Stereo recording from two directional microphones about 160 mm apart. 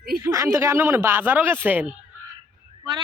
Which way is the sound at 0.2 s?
20° right (ahead or behind).